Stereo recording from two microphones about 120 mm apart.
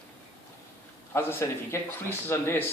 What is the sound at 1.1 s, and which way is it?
Speech, 20° left (ahead or behind).